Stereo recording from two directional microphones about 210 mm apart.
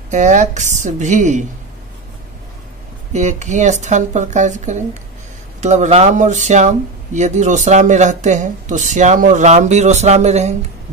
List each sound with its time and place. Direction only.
0.1 s speech: 35° right (ahead or behind)
3.1 s speech: 35° right (ahead or behind)